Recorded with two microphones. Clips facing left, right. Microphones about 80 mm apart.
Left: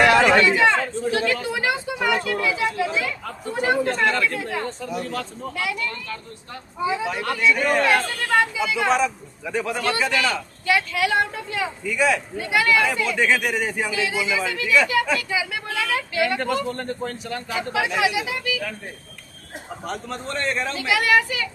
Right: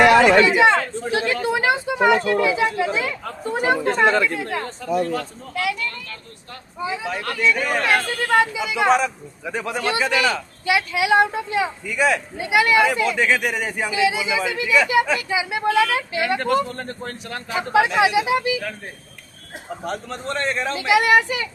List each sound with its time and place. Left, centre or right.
0.4 s speech: centre
4.5 s speech: centre
8.2 s speech: centre
11.8 s speech: centre
12.4 s speech: centre
13.0 s speech: centre
13.8 s speech: centre
16.7 s speech: centre
17.7 s speech: right
19.8 s speech: centre
20.7 s speech: right